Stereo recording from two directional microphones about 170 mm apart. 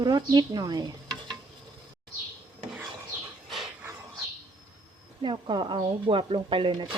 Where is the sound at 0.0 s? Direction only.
25° right (ahead or behind).